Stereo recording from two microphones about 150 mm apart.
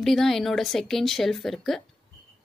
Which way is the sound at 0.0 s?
Centre (ahead or behind).